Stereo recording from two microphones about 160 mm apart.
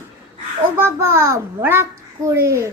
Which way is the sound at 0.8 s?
15° right (ahead or behind).